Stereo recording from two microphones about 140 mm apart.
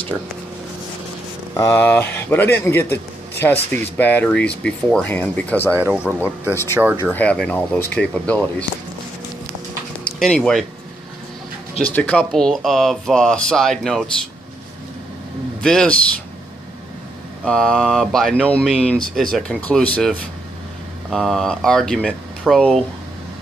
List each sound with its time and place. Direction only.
1.6 s a man's voice: 15° left (ahead or behind)
5.7 s speech: 20° right (ahead or behind)
5.9 s speech: 10° right (ahead or behind)
6.5 s a man's voice: 15° left (ahead or behind)
10.1 s speech: 5° left (ahead or behind)
11.9 s speech: 10° left (ahead or behind)
15.6 s speech: 5° left (ahead or behind)
17.5 s speech: 5° left (ahead or behind)